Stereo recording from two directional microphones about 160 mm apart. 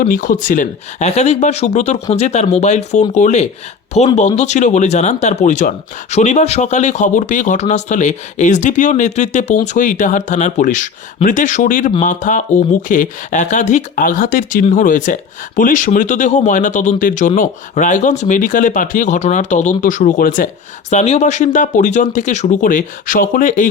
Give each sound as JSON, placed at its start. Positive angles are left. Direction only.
{"t": 0.0, "sound": "speech", "side_deg": 55}
{"t": 20.9, "sound": "speech", "side_deg": 45}